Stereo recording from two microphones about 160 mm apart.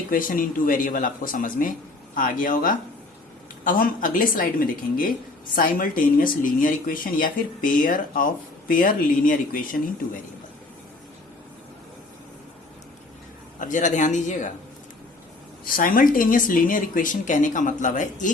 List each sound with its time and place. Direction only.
0.1 s speech: 60° left (ahead or behind)
13.6 s speech: 50° left (ahead or behind)
15.6 s speech: 60° left (ahead or behind)